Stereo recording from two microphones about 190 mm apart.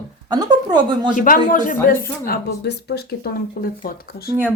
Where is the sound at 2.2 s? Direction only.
55° left (ahead or behind).